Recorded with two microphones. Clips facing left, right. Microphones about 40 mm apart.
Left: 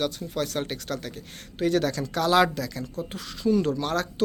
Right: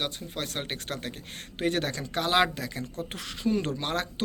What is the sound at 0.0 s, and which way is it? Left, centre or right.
Speech, right.